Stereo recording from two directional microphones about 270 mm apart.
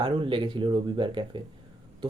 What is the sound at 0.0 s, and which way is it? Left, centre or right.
Speech, centre.